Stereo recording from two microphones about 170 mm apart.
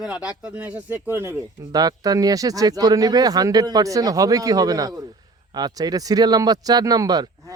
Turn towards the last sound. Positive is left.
turn(degrees=-20)  # may be behind; listen again after turning